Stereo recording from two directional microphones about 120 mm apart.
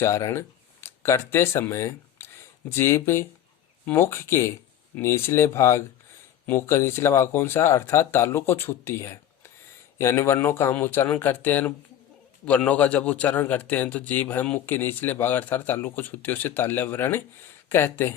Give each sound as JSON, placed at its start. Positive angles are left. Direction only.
{"t": 0.0, "sound": "a man's voice", "side_deg": 20}